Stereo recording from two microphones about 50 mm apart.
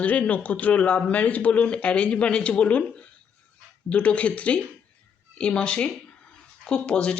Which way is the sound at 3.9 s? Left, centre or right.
Left.